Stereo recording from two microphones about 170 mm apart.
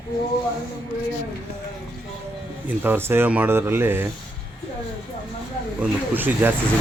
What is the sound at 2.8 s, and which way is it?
Speech, 15° right (ahead or behind).